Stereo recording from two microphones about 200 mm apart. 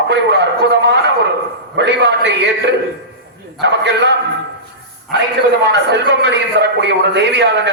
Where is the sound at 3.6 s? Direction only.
60° right (ahead or behind).